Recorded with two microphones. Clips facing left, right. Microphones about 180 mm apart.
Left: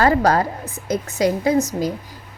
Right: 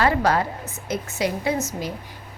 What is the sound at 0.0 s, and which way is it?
A woman's voice, 40° left (ahead or behind).